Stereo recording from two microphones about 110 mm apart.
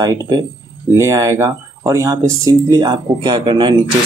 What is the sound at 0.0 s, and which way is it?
Speech, 35° right (ahead or behind).